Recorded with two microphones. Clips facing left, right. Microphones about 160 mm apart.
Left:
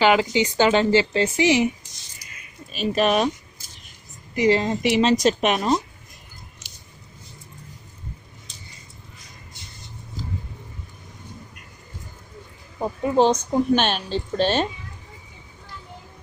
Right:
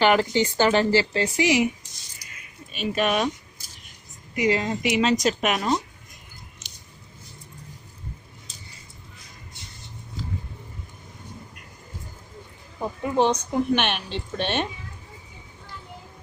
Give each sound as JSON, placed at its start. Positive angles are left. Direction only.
{"t": 0.0, "sound": "speech", "side_deg": 15}
{"t": 2.7, "sound": "speech", "side_deg": 30}
{"t": 4.4, "sound": "a woman's voice", "side_deg": 30}
{"t": 12.8, "sound": "a woman's voice", "side_deg": 25}